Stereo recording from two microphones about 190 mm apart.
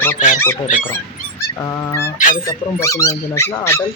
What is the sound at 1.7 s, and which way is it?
Speech, 15° left (ahead or behind).